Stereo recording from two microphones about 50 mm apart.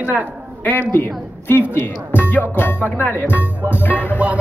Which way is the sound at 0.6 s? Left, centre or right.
Left.